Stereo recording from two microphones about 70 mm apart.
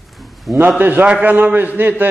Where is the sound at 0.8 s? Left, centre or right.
Right.